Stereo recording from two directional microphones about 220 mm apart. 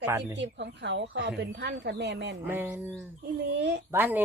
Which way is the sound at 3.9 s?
10° right (ahead or behind).